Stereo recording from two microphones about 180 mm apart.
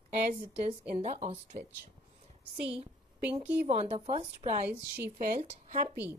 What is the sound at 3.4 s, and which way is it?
A woman's voice, 35° right (ahead or behind).